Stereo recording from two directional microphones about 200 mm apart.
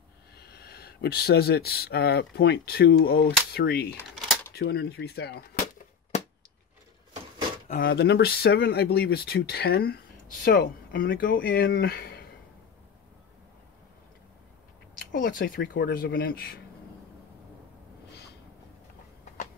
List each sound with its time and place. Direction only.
0.4 s speech: 50° left (ahead or behind)
7.6 s speech: 45° left (ahead or behind)
15.1 s speech: 45° left (ahead or behind)